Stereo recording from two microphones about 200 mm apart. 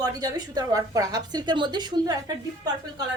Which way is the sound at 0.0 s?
20° right (ahead or behind).